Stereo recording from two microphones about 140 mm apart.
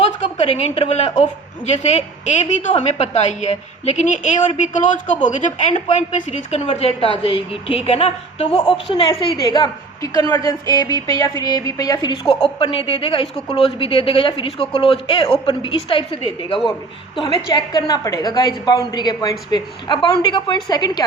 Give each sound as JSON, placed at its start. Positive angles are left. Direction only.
{"t": 0.3, "sound": "a woman's voice", "side_deg": 50}
{"t": 9.4, "sound": "a woman's voice", "side_deg": 30}
{"t": 12.5, "sound": "a woman's voice", "side_deg": 40}